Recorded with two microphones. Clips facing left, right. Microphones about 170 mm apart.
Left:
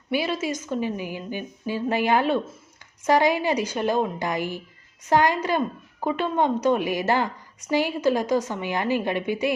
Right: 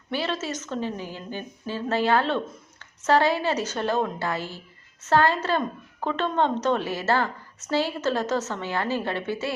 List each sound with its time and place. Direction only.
0.1 s a woman's voice: 10° left (ahead or behind)